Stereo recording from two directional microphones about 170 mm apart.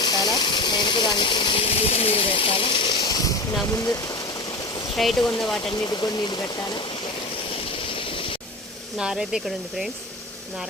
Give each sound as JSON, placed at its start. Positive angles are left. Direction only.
{"t": 0.0, "sound": "a sound", "side_deg": 25}
{"t": 3.7, "sound": "speech", "side_deg": 20}
{"t": 4.9, "sound": "speech", "side_deg": 0}
{"t": 5.7, "sound": "speech", "side_deg": 25}
{"t": 7.9, "sound": "a sound", "side_deg": 30}
{"t": 9.0, "sound": "speech", "side_deg": -5}